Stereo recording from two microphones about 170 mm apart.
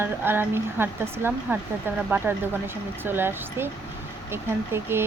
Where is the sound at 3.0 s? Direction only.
15° right (ahead or behind).